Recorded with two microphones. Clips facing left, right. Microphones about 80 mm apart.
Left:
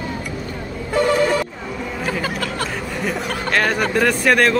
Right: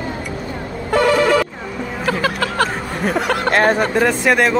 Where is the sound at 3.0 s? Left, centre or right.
Right.